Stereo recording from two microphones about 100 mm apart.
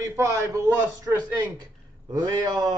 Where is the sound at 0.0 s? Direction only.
30° right (ahead or behind).